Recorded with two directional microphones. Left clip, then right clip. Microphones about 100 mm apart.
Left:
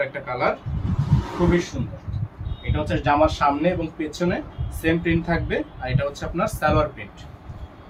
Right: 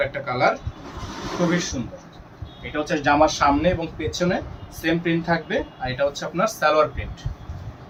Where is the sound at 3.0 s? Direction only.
15° right (ahead or behind).